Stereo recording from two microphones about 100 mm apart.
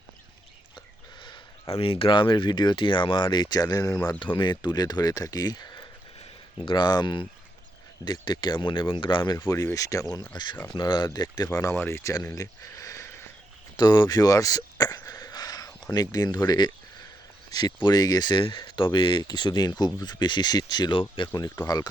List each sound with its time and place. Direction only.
1.7 s speech: 70° left (ahead or behind); by 4.1 s 40° left (ahead or behind)
4.2 s speech: 55° left (ahead or behind)
9.4 s speech: 25° left (ahead or behind)
10.3 s speech: 50° left (ahead or behind)
11.7 s speech: 25° left (ahead or behind)
12.2 s a sound: 35° left (ahead or behind)
13.7 s a sound: 45° left (ahead or behind)
16.5 s speech: 45° left (ahead or behind)